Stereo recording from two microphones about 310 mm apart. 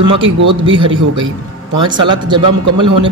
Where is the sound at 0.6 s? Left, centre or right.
Centre.